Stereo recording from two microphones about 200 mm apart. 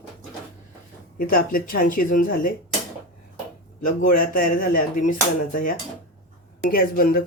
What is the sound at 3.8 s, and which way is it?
A man's voice, 40° left (ahead or behind).